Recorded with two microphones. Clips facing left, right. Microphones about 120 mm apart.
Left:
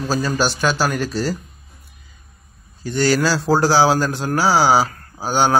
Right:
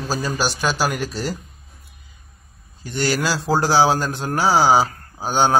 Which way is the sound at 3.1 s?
20° right (ahead or behind).